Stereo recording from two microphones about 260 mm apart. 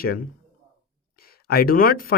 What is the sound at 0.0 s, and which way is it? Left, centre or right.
Speech, left.